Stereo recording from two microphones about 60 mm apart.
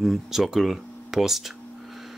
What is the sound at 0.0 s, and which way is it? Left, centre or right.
Speech, centre.